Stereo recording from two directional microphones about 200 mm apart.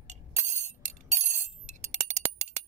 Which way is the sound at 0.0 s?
35° right (ahead or behind).